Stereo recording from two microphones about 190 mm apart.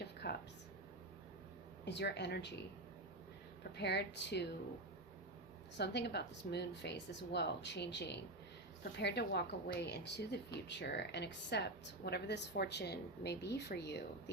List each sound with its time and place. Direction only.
0.0 s a sound: 60° left (ahead or behind)
1.8 s speech: 65° left (ahead or behind)
5.7 s speech: 65° left (ahead or behind)